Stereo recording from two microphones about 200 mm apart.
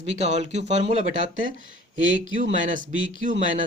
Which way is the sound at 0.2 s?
35° right (ahead or behind).